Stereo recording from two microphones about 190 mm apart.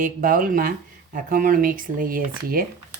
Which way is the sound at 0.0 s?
45° right (ahead or behind).